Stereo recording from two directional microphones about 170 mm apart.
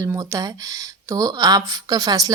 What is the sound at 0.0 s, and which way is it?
Speech, 20° right (ahead or behind).